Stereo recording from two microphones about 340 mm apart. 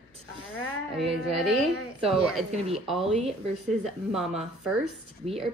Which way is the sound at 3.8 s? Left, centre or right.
Centre.